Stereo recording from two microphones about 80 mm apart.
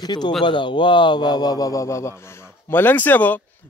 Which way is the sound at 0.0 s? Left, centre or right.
Left.